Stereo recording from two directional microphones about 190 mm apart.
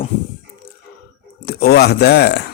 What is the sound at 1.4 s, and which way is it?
Speech, 55° left (ahead or behind).